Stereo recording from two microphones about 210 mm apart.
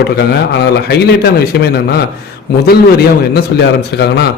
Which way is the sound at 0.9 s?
50° left (ahead or behind).